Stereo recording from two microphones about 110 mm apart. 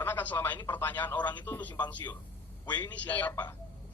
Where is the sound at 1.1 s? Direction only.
45° left (ahead or behind).